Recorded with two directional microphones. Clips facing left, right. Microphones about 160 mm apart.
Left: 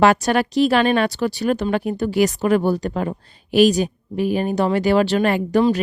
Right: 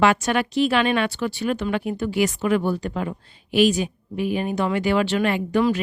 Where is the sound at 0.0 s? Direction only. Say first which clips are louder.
Left 4 dB; 40° left (ahead or behind).